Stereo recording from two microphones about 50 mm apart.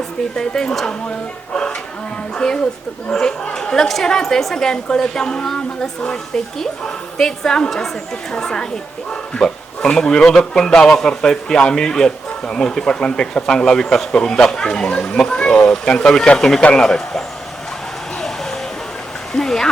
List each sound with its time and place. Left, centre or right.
0.3 s a man's voice: centre
2.3 s a man's voice: centre
19.3 s a man's voice: centre